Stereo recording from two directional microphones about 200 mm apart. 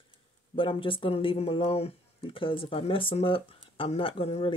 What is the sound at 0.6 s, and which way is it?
Speech, 25° left (ahead or behind).